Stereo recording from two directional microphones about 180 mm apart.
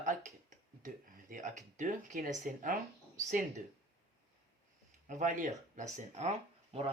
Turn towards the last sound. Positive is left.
turn(degrees=-35)  # may be behind; listen again after turning